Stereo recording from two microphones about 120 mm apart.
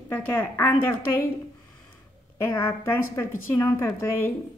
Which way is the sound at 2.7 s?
20° left (ahead or behind).